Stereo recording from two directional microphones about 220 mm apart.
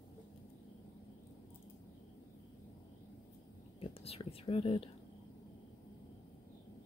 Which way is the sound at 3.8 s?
25° left (ahead or behind).